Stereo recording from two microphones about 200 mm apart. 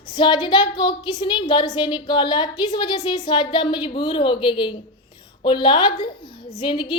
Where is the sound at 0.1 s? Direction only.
20° left (ahead or behind).